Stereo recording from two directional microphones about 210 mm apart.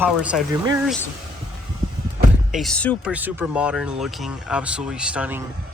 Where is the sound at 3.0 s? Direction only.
10° right (ahead or behind).